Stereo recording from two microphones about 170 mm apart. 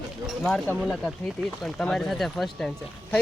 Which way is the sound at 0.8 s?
Centre (ahead or behind).